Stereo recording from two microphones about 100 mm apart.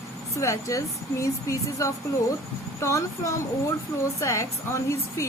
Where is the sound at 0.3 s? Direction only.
30° left (ahead or behind).